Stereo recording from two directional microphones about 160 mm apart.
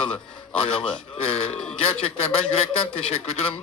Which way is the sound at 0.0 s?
35° left (ahead or behind).